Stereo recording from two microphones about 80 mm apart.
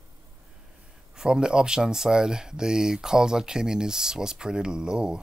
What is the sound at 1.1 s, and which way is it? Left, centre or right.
Speech, centre.